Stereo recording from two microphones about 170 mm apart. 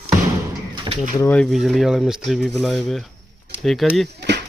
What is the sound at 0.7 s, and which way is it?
Bird, 25° right (ahead or behind).